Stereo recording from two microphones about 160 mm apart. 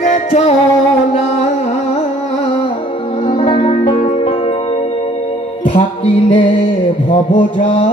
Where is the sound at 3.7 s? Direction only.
50° left (ahead or behind).